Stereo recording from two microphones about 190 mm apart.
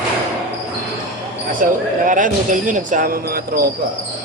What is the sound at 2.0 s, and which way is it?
Speech, 45° right (ahead or behind).